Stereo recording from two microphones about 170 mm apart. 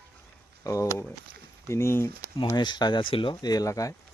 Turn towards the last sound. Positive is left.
turn(degrees=20)  # may be behind; listen again after turning